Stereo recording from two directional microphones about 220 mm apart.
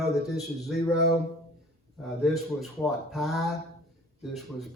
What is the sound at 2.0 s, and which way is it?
Speech, centre (ahead or behind).